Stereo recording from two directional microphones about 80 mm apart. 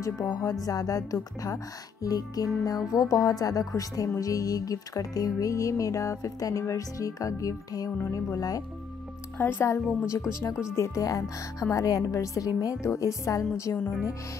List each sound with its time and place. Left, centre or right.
0.4 s speech: left
9.4 s a woman's voice: left
10.8 s a woman's voice: left